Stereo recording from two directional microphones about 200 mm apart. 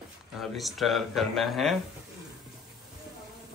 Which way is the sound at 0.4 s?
Centre (ahead or behind).